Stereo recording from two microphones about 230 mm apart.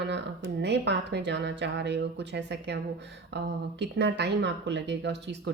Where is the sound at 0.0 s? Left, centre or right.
Right.